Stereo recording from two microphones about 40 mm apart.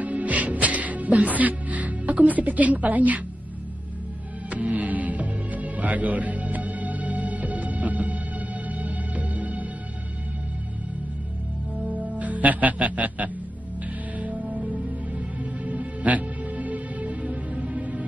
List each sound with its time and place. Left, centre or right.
0.0 s music: right
4.5 s music: right
11.9 s music: right